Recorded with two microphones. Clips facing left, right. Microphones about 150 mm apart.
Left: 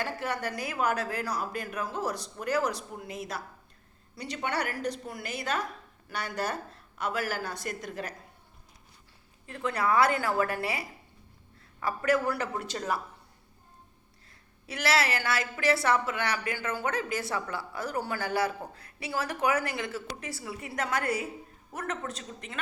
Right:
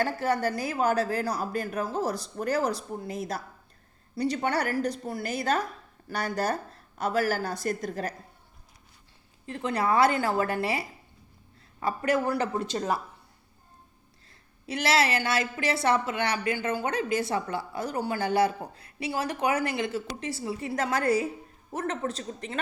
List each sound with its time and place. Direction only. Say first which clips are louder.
0.0 s a woman's voice: right 6 dB; 35° right (ahead or behind)
9.5 s a woman's voice: right 2 dB; 25° right (ahead or behind)
14.7 s a woman's voice: right 3 dB; 25° right (ahead or behind)